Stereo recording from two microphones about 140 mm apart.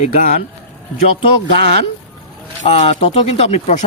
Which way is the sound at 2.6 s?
50° left (ahead or behind).